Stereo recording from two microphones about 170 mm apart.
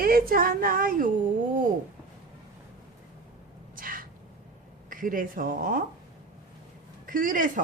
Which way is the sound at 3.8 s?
55° right (ahead or behind).